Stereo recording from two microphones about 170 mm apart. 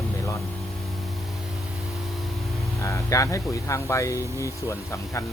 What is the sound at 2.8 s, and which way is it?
Speech, 20° left (ahead or behind).